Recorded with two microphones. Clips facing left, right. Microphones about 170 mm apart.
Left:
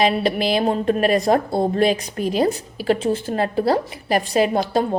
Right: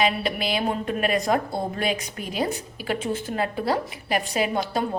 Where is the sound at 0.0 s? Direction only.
35° left (ahead or behind).